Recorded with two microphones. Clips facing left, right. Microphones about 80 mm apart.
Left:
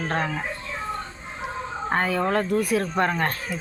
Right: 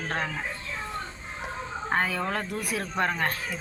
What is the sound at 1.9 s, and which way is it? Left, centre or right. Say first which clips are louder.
Speech: left 5 dB; centre.